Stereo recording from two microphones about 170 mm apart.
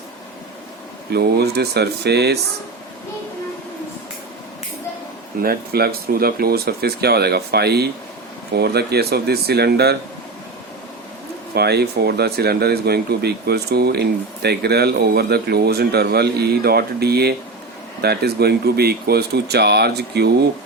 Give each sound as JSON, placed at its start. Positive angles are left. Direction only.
{"t": 1.1, "sound": "speech", "side_deg": -70}
{"t": 5.4, "sound": "speech", "side_deg": -65}
{"t": 11.5, "sound": "speech", "side_deg": -70}